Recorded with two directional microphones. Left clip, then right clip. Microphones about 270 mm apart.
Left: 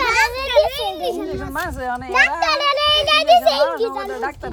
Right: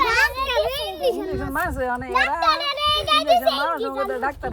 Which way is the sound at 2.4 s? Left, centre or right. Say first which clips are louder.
Left 3 dB; left.